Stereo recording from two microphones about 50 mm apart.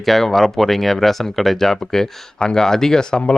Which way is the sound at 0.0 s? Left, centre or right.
Centre.